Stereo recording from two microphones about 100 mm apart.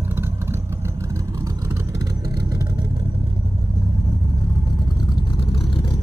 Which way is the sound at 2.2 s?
45° right (ahead or behind).